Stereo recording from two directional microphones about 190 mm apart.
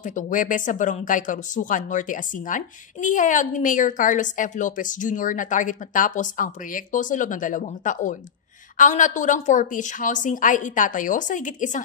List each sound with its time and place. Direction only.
0.0 s speech: 45° left (ahead or behind)